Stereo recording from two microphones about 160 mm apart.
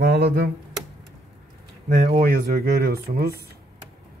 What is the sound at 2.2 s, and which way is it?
Speech, 70° right (ahead or behind).